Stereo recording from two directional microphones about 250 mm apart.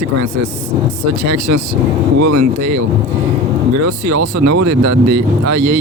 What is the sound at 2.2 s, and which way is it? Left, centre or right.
Speech, right.